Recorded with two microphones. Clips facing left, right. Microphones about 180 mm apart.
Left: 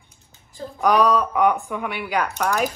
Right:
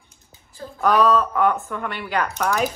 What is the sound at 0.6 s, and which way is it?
Speech, 15° left (ahead or behind).